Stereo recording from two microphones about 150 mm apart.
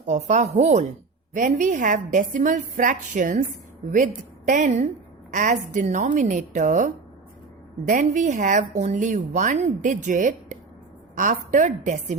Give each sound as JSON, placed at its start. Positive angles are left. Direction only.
{"t": 0.0, "sound": "speech", "side_deg": -50}